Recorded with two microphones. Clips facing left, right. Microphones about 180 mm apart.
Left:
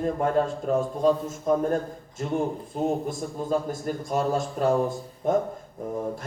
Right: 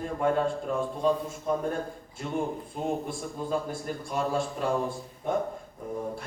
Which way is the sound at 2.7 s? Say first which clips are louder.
Left 5 dB; 40° left (ahead or behind).